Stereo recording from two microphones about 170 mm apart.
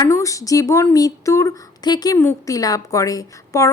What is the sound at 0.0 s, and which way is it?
A woman's voice, 20° left (ahead or behind).